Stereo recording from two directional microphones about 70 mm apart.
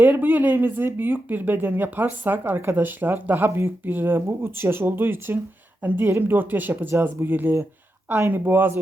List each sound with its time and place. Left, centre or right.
0.0 s speech: right